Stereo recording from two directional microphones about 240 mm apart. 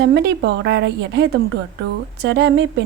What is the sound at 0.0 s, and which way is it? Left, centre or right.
A woman's voice, right.